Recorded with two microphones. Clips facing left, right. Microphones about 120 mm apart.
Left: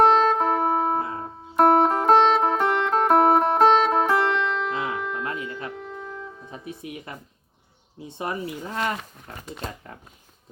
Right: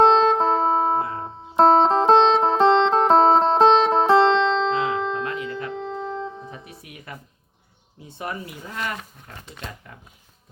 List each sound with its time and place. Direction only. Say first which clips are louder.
0.0 s music: right 2 dB; 25° right (ahead or behind)
6.8 s music: left 4 dB; 25° left (ahead or behind)
7.9 s speech: left 2 dB; 25° left (ahead or behind)